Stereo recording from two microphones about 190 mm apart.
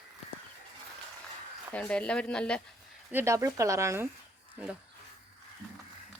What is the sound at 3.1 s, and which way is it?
Speech, 15° right (ahead or behind).